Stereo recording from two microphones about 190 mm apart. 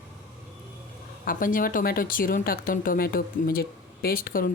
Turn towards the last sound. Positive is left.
turn(degrees=50)  # may be behind; listen again after turning